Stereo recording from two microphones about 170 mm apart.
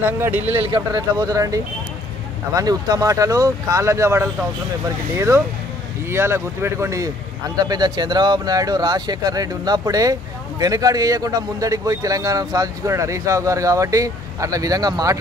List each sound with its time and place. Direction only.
0.0 s speech: 10° right (ahead or behind)
0.6 s speech: 30° right (ahead or behind)